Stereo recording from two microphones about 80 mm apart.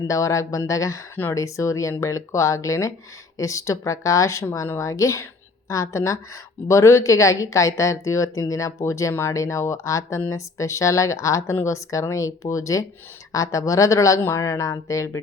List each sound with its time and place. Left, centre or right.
0.1 s a woman's voice: left